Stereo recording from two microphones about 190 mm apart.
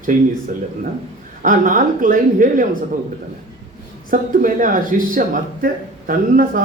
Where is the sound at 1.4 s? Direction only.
45° right (ahead or behind).